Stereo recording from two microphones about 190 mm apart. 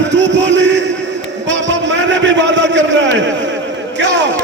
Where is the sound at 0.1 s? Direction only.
70° right (ahead or behind).